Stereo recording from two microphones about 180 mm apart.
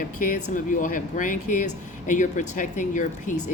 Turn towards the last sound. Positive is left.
turn(degrees=45)  # may be behind; listen again after turning